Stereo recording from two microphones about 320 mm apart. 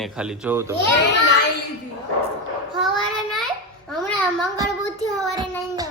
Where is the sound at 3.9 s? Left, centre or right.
Centre.